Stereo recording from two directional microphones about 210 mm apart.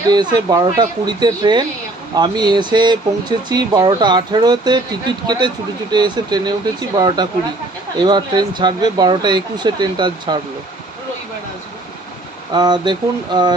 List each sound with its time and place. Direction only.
0.1 s speech: 20° right (ahead or behind)
12.5 s speech: 20° right (ahead or behind)